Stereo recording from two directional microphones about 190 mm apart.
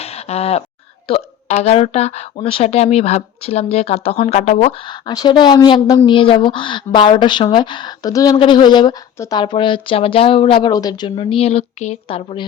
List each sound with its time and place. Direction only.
0.0 s a sound: 35° left (ahead or behind)
1.0 s speech: 30° left (ahead or behind)
4.9 s a woman's voice: 25° left (ahead or behind)